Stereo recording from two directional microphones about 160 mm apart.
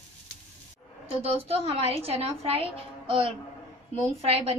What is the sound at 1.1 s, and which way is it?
A woman's voice, 40° right (ahead or behind).